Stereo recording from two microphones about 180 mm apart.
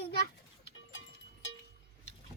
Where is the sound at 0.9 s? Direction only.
90° left.